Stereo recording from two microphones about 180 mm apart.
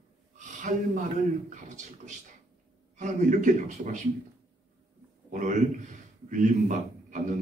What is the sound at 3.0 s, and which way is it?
A man's voice, 45° right (ahead or behind).